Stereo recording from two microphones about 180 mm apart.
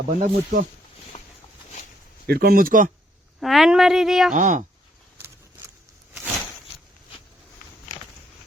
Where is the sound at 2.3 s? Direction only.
55° right (ahead or behind).